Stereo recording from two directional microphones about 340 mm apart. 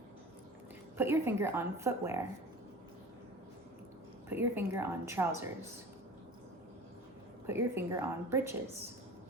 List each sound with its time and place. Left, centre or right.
0.9 s a woman's voice: centre
4.3 s a woman's voice: centre
7.4 s a woman's voice: centre